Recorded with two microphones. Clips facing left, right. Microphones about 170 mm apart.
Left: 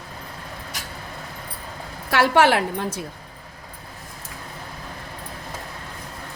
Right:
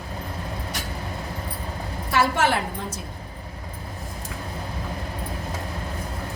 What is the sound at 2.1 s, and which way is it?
Speech, 75° left (ahead or behind).